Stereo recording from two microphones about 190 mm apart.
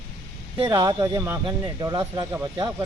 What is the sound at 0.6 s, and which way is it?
Speech, 20° right (ahead or behind).